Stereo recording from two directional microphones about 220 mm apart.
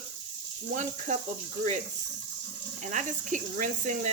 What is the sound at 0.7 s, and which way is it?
Speech, 35° right (ahead or behind).